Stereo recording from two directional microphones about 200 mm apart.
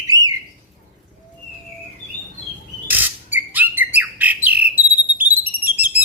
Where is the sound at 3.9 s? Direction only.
10° right (ahead or behind).